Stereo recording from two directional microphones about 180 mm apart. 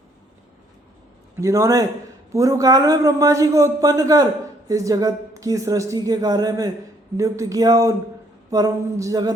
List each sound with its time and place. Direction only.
1.4 s a man's voice: 15° right (ahead or behind)